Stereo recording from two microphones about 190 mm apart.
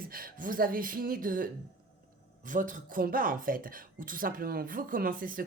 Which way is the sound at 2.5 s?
45° right (ahead or behind).